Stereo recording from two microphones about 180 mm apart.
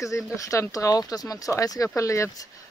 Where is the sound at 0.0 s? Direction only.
15° left (ahead or behind).